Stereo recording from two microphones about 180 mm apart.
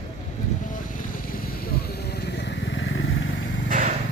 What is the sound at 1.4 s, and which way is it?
Vehicle, 55° left (ahead or behind).